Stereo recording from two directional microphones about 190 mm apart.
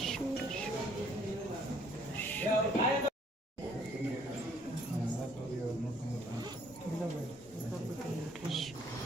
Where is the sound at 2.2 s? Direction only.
10° left (ahead or behind).